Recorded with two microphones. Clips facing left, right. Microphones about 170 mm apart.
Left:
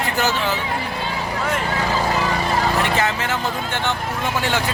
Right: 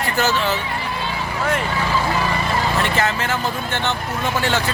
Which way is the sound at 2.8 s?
15° left (ahead or behind).